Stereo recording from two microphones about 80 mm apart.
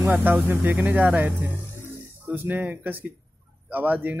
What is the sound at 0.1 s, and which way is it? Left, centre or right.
Speech, right.